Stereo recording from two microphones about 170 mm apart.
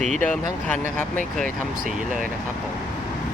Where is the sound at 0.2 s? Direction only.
10° left (ahead or behind).